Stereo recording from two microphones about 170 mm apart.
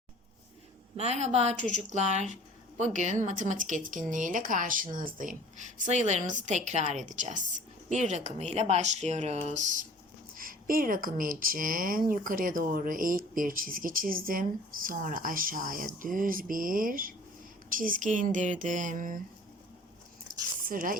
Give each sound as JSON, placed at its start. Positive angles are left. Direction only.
{"t": 0.9, "sound": "speech", "side_deg": -40}
{"t": 10.3, "sound": "speech", "side_deg": -55}
{"t": 20.2, "sound": "a sound", "side_deg": -55}